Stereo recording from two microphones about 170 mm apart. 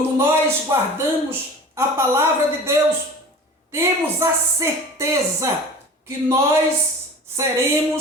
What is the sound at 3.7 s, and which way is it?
A woman's voice, 15° right (ahead or behind).